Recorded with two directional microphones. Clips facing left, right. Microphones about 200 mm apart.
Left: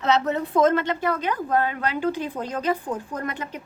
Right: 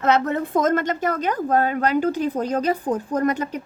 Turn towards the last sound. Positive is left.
turn(degrees=-40)  # may be behind; listen again after turning